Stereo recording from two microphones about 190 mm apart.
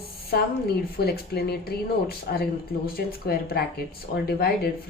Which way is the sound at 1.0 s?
55° left (ahead or behind).